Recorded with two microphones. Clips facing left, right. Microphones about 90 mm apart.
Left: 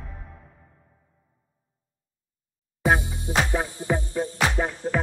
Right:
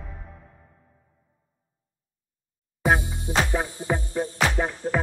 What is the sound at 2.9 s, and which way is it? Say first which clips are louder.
Music: even; 15° left (ahead or behind).